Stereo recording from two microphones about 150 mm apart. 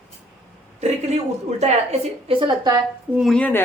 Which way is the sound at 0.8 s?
45° right (ahead or behind).